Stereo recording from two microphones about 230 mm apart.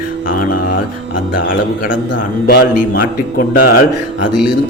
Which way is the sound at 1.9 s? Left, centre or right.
Left.